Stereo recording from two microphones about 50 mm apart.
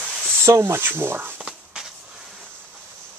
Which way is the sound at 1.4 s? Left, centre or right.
Centre.